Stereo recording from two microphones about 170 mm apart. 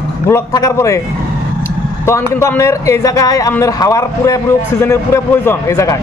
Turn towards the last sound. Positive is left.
turn(degrees=15)  # may be behind; listen again after turning